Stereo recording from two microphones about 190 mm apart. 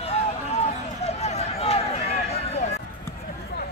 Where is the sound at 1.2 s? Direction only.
35° left (ahead or behind).